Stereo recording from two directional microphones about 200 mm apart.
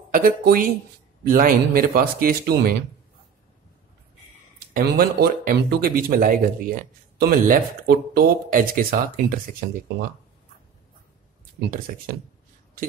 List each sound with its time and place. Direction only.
0.1 s speech: 45° right (ahead or behind)
4.7 s speech: 45° right (ahead or behind)